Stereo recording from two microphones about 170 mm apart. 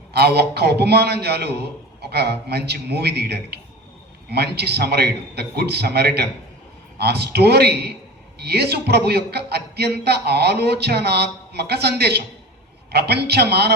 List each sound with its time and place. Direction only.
0.1 s a man's voice: 70° right (ahead or behind)